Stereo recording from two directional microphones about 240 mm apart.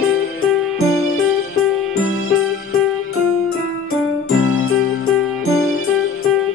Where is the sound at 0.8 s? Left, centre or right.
Left.